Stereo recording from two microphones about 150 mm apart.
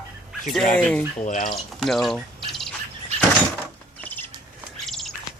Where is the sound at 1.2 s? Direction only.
60° left (ahead or behind).